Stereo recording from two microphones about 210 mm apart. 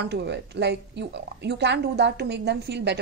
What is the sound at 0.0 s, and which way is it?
A woman's voice, 55° right (ahead or behind).